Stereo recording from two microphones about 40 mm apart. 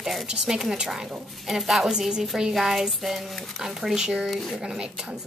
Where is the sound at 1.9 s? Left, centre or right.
Centre.